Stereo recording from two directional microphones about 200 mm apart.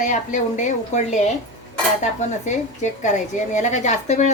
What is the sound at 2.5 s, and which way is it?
A woman's voice, 35° left (ahead or behind).